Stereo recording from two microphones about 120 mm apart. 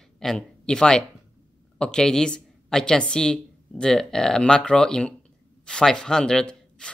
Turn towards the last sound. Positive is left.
turn(degrees=5)  # may be behind; listen again after turning